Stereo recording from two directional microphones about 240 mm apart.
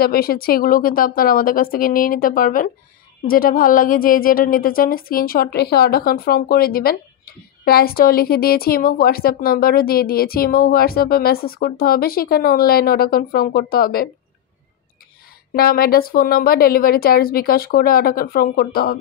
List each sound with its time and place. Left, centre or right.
0.0 s a woman's voice: left
15.5 s a woman's voice: left